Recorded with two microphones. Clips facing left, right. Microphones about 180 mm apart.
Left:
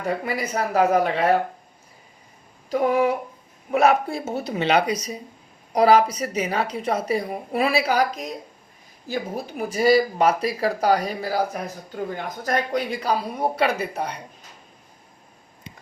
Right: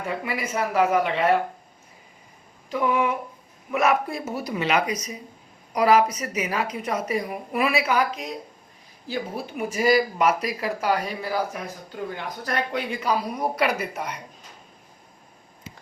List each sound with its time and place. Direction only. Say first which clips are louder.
0.0 s speech: left 3 dB; 40° left (ahead or behind)
2.6 s speech: left 3 dB; 40° left (ahead or behind)